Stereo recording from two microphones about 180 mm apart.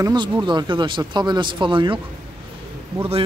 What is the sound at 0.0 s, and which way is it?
Speech, 25° right (ahead or behind).